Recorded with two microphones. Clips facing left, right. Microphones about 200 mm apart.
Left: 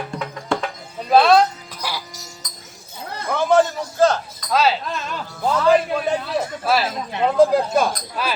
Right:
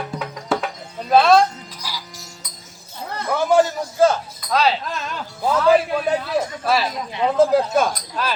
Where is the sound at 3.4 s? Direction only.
10° right (ahead or behind).